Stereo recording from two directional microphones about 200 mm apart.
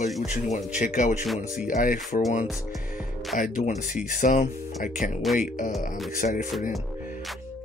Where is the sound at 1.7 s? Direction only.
45° left (ahead or behind).